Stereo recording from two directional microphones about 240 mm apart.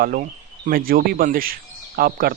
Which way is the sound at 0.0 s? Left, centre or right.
Right.